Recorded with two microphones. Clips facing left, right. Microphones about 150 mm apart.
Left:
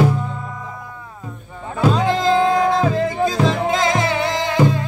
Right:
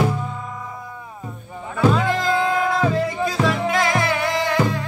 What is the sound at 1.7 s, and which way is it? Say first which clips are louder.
Music: left 1 dB; 20° left (ahead or behind).